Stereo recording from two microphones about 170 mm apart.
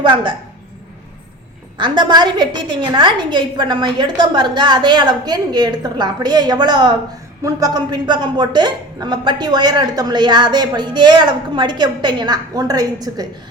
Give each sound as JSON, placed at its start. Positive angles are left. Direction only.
{"t": 0.0, "sound": "a woman's voice", "side_deg": -30}
{"t": 1.8, "sound": "a woman's voice", "side_deg": -25}